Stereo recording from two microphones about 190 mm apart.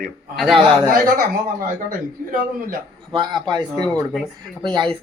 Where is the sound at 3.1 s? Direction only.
20° right (ahead or behind).